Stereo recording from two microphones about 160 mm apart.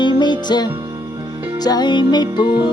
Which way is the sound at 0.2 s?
25° left (ahead or behind).